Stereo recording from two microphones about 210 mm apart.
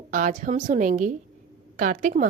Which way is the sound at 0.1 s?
40° right (ahead or behind).